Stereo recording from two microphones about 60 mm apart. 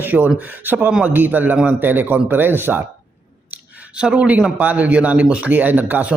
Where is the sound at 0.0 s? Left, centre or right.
Right.